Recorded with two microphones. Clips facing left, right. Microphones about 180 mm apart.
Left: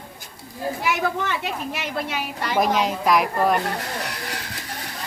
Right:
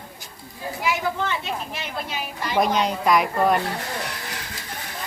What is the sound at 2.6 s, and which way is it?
Speech, centre (ahead or behind).